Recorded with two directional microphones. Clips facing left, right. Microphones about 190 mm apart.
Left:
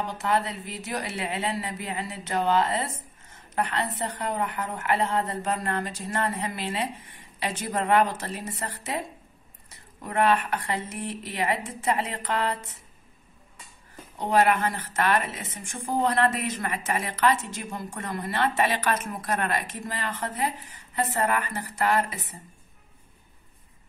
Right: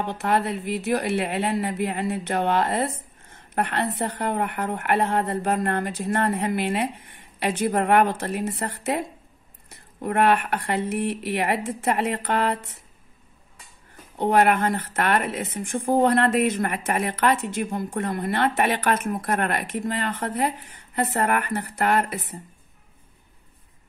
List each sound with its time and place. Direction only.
0.0 s a woman's voice: 60° right (ahead or behind)
14.1 s a woman's voice: 60° right (ahead or behind)